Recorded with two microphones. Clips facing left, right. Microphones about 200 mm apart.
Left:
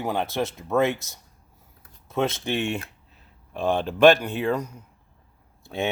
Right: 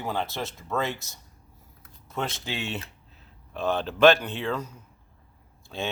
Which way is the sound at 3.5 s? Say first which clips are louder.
Left 3 dB; 15° left (ahead or behind).